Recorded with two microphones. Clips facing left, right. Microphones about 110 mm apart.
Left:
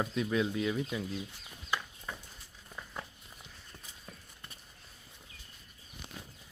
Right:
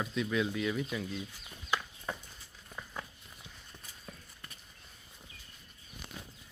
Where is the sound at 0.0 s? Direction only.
30° left (ahead or behind).